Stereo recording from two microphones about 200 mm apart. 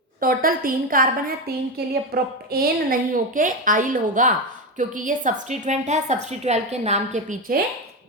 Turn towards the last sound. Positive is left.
turn(degrees=-45)  # may be behind; listen again after turning